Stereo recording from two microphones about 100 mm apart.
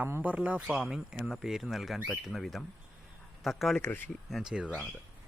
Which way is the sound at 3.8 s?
15° left (ahead or behind).